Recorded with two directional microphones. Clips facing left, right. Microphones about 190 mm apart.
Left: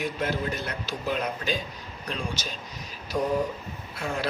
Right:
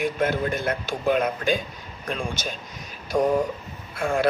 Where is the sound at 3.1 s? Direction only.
90° right.